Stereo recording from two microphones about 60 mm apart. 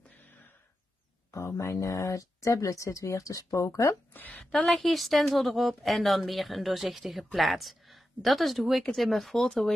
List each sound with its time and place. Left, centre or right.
1.3 s speech: left
4.1 s a woman's voice: left
4.5 s a woman's voice: centre